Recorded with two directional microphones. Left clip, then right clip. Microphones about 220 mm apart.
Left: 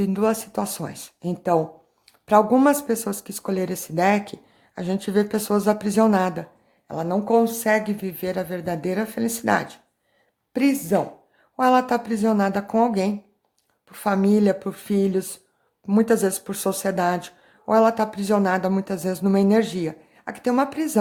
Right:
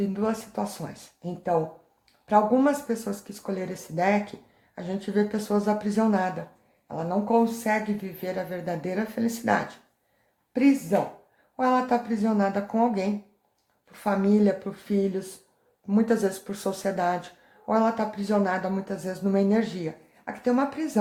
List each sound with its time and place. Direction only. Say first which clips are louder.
0.0 s speech: left 6 dB; 45° left (ahead or behind)